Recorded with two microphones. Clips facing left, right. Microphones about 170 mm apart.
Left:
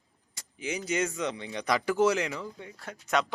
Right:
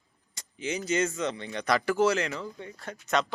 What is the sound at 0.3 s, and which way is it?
Speech, 10° left (ahead or behind).